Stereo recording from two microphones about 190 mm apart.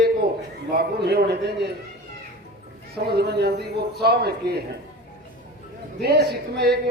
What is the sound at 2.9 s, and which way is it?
A man's voice, 60° right (ahead or behind).